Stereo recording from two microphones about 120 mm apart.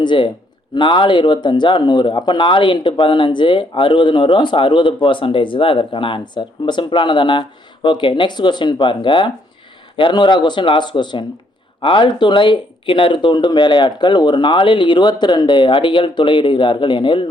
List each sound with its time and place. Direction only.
0.0 s speech: 40° left (ahead or behind)